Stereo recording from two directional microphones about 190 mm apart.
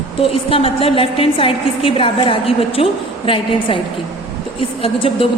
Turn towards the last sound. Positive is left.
turn(degrees=30)  # may be behind; listen again after turning